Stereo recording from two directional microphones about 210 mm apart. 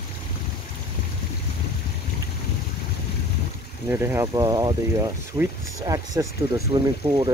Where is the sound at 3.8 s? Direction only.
10° right (ahead or behind).